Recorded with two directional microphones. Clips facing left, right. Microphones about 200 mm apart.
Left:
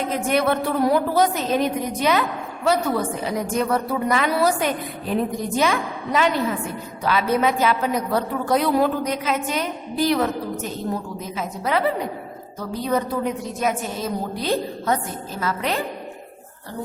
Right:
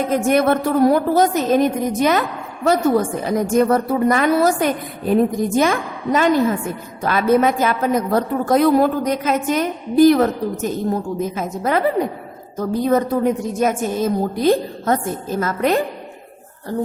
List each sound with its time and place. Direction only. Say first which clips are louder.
0.1 s a woman's voice: right 5 dB; 45° right (ahead or behind)